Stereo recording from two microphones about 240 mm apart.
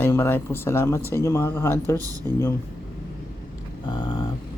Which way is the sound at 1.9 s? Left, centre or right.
Centre.